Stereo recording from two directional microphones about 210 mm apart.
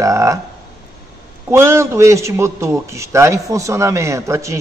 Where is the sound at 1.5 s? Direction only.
15° right (ahead or behind).